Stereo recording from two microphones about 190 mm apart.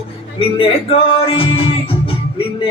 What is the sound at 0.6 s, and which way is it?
Music, 30° left (ahead or behind).